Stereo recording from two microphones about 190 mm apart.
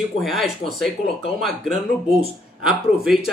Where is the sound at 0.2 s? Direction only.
Centre (ahead or behind).